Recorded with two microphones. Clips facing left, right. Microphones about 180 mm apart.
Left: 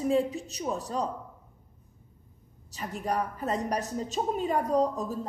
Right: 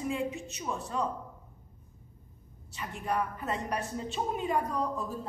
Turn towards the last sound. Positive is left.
turn(degrees=40)  # may be behind; listen again after turning